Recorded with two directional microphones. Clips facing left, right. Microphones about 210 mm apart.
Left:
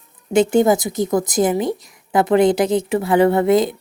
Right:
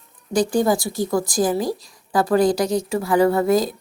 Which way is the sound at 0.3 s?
25° left (ahead or behind).